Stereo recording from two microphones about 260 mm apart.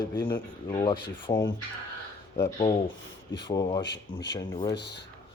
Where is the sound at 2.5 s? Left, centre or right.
Centre.